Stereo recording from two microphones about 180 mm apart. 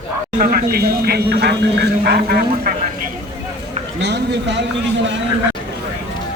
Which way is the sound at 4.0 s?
70° right (ahead or behind).